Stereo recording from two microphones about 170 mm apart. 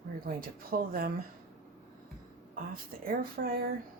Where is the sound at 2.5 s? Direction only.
55° right (ahead or behind).